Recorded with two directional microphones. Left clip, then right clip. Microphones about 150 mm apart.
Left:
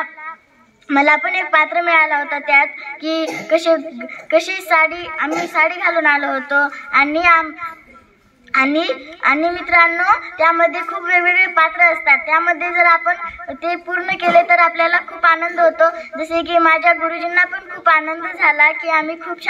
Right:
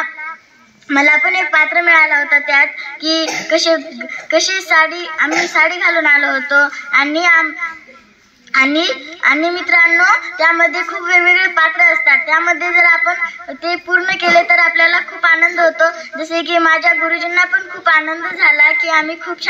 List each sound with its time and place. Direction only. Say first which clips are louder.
0.8 s a woman's voice: right 3 dB; 55° left (ahead or behind)